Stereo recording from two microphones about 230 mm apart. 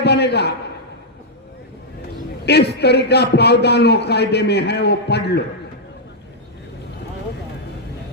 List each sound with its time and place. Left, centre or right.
0.0 s a man's voice: left
2.5 s a man's voice: left